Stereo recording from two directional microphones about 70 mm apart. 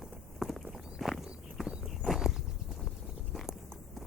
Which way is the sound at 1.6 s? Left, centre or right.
Centre.